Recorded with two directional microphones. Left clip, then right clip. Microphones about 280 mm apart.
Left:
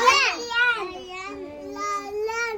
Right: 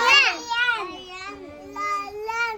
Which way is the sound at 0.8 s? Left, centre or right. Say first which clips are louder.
Even; centre.